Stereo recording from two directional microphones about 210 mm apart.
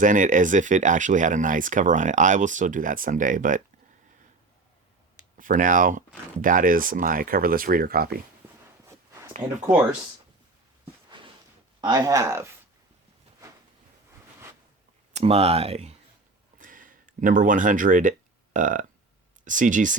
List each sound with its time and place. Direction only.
0.0 s speech: 40° right (ahead or behind)
5.4 s speech: 40° right (ahead or behind)
9.4 s speech: 20° right (ahead or behind)
11.8 s speech: 20° right (ahead or behind)
15.1 s speech: 30° right (ahead or behind)
16.6 s a sound: 40° right (ahead or behind)
18.5 s speech: 40° right (ahead or behind)